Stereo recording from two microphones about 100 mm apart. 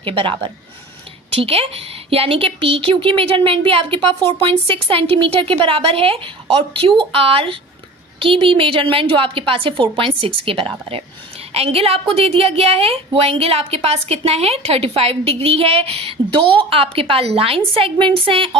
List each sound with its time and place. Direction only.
0.0 s a woman's voice: 65° right (ahead or behind)
4.3 s a woman's voice: 70° right (ahead or behind)
11.5 s a woman's voice: 85° right; by 18.5 s 65° right (ahead or behind)